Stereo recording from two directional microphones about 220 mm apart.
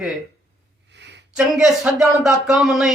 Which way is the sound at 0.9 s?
50° right (ahead or behind).